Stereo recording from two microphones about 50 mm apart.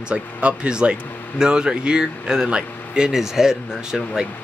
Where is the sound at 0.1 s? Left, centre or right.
Right.